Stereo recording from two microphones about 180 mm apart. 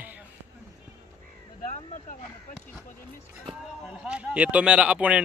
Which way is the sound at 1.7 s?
45° left (ahead or behind).